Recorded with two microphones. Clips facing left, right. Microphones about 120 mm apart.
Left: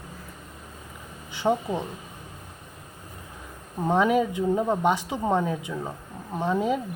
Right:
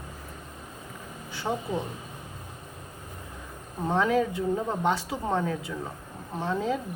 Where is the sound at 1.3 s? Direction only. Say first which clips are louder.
Left 5 dB; 20° left (ahead or behind).